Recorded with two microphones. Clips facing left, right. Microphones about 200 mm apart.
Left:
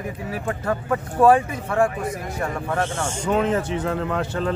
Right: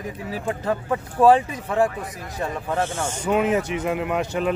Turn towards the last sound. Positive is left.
turn(degrees=-15)  # may be behind; listen again after turning